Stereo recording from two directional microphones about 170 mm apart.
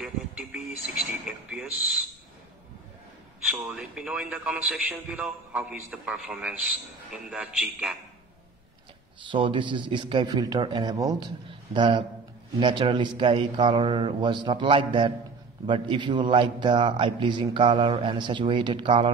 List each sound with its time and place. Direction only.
0.0 s speech: 5° right (ahead or behind)
3.5 s a man's voice: 5° right (ahead or behind)
9.3 s a man's voice: 30° right (ahead or behind)